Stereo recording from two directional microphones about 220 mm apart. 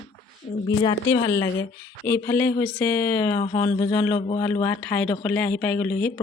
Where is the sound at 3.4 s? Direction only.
25° left (ahead or behind).